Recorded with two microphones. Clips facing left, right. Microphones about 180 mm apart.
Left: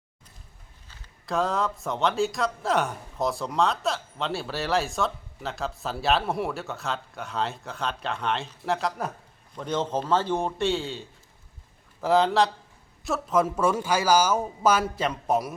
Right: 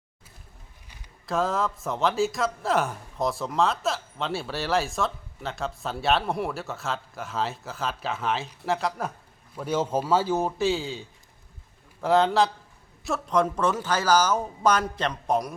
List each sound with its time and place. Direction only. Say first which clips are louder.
1.3 s a man's voice: even; centre (ahead or behind)